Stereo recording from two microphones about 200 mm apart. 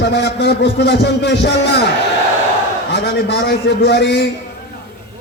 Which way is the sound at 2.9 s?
60° left (ahead or behind).